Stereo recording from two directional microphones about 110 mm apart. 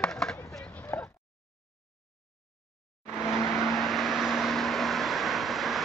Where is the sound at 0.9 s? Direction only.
25° left (ahead or behind).